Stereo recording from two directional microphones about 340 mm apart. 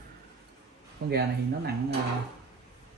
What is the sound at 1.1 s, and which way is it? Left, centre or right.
Speech, right.